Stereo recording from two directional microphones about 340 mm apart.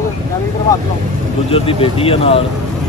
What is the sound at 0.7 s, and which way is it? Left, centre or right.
Speech, centre.